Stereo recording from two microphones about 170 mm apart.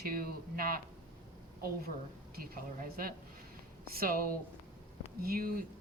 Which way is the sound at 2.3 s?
60° right (ahead or behind).